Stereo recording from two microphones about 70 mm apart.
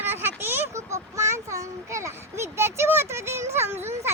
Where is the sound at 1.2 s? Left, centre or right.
Right.